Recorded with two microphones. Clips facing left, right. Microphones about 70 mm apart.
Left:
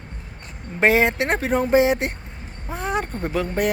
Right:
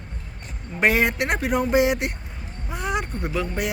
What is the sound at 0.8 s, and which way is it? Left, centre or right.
Speech, left.